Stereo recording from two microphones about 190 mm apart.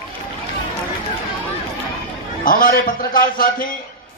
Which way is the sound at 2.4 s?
50° left (ahead or behind).